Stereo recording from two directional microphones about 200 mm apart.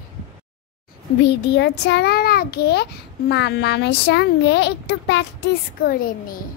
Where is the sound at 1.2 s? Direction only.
60° left (ahead or behind).